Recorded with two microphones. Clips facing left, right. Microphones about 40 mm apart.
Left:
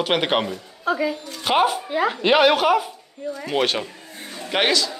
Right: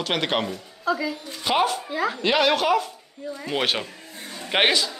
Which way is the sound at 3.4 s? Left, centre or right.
Centre.